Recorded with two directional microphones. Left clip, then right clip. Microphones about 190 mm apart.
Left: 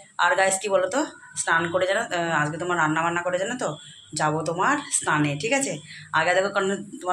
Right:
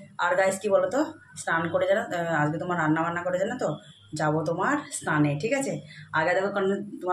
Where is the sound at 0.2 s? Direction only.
5° right (ahead or behind).